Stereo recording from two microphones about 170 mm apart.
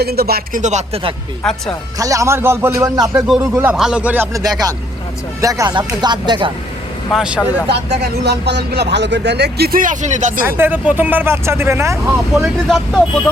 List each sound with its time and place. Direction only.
0.0 s speech: 65° right (ahead or behind)
0.6 s speech: 45° right (ahead or behind)
1.4 s speech: 5° left (ahead or behind)
2.0 s speech: 20° right (ahead or behind)
3.5 s speech: 5° right (ahead or behind); by 6.5 s 25° right (ahead or behind)
7.1 s speech: 5° right (ahead or behind)
8.2 s speech: 80° right; by 10.4 s 45° right (ahead or behind)
10.4 s speech: 10° right (ahead or behind)
12.6 s speech: centre (ahead or behind)